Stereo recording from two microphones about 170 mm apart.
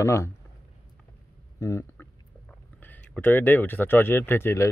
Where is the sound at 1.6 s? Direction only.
15° left (ahead or behind).